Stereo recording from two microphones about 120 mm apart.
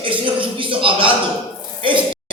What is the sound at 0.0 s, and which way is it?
Speech, 45° right (ahead or behind).